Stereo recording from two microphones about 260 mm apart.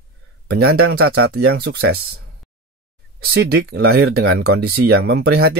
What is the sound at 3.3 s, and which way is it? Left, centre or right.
Speech, right.